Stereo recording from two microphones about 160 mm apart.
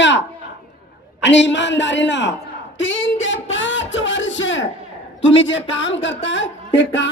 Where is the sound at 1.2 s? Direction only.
90° left.